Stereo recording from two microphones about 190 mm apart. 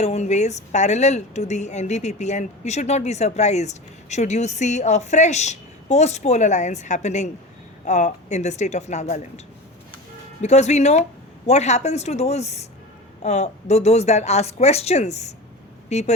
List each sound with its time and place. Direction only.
0.0 s a woman's voice: 35° left (ahead or behind)
10.4 s a woman's voice: 35° left (ahead or behind)